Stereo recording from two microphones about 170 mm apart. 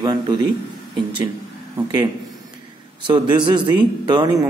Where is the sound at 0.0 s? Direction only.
25° right (ahead or behind).